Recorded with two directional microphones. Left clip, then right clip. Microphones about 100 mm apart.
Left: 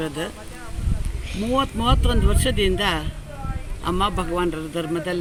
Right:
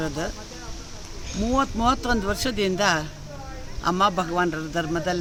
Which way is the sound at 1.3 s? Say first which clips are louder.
Left 1 dB; 20° right (ahead or behind).